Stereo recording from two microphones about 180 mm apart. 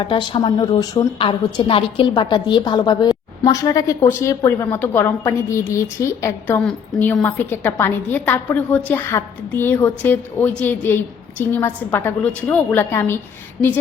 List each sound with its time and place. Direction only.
0.0 s a woman's voice: 25° left (ahead or behind)